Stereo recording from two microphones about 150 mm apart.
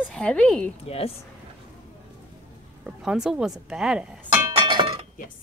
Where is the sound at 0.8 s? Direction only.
40° left (ahead or behind).